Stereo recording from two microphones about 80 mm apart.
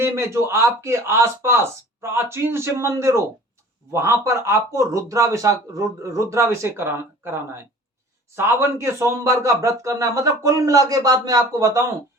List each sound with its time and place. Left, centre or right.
0.0 s speech: right